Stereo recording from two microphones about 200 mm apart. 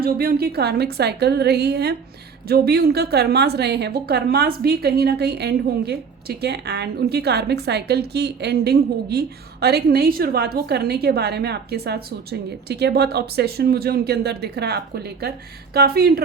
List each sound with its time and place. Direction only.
0.0 s a woman's voice: 50° right (ahead or behind)